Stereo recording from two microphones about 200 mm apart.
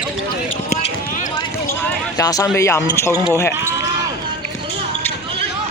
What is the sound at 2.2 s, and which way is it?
Speech, 15° left (ahead or behind).